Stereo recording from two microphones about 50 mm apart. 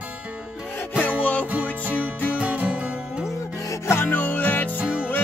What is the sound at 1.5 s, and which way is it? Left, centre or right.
Music, right.